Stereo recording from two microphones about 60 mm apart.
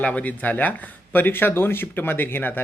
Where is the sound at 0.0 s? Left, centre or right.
Left.